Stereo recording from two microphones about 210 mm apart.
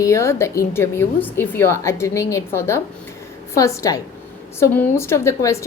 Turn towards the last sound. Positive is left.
turn(degrees=15)  # may be behind; listen again after turning